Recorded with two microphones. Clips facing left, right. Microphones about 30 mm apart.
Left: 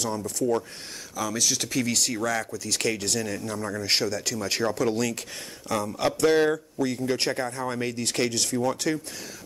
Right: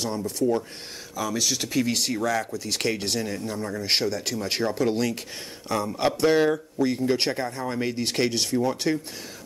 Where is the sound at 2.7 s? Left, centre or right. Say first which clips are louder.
Left 1 dB; right.